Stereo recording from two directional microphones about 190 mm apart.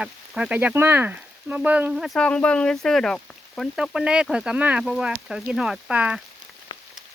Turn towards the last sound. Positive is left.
turn(degrees=25)  # may be behind; listen again after turning